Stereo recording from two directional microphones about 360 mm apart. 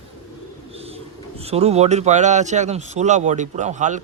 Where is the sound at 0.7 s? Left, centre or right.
Centre.